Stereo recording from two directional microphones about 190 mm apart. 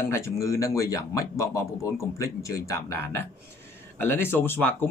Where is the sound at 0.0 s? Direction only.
15° left (ahead or behind).